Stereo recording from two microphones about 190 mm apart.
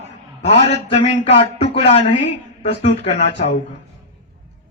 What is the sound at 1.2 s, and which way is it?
A man's voice, 30° left (ahead or behind).